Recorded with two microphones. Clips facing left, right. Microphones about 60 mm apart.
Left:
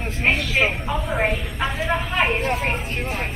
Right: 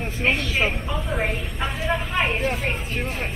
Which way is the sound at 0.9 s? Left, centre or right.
Centre.